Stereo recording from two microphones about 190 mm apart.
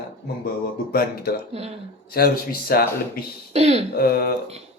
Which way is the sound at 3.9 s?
55° left (ahead or behind).